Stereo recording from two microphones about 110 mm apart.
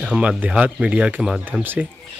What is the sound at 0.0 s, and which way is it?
Speech, 10° right (ahead or behind).